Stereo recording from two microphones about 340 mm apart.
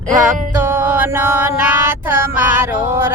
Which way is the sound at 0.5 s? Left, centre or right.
Centre.